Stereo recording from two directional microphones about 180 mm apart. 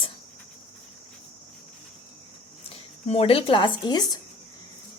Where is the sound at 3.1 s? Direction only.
30° left (ahead or behind).